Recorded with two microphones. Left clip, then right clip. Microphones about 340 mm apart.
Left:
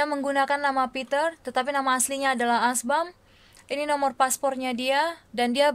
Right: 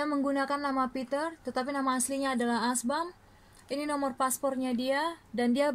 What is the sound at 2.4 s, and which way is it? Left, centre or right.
Speech, left.